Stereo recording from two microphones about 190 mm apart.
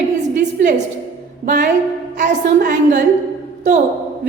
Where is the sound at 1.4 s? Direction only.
45° right (ahead or behind).